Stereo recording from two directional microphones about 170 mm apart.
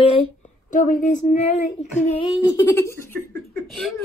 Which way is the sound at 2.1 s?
25° left (ahead or behind).